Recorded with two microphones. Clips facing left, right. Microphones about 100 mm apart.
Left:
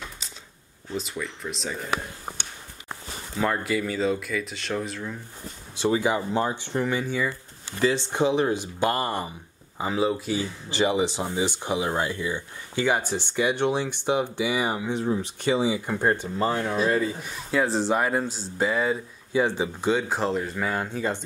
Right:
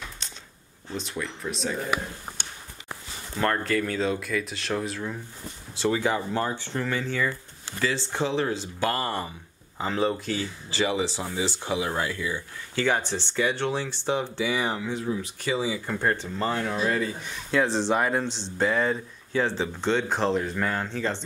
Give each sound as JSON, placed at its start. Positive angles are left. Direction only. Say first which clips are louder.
{"t": 0.9, "sound": "speech", "louder": "left 1 dB", "side_deg": 0}
{"t": 3.3, "sound": "speech", "louder": "even", "side_deg": 5}
{"t": 5.8, "sound": "speech", "louder": "left 2 dB", "side_deg": 15}
{"t": 10.7, "sound": "speech", "louder": "left 3 dB", "side_deg": 20}
{"t": 15.0, "sound": "speech", "louder": "left 5 dB", "side_deg": 30}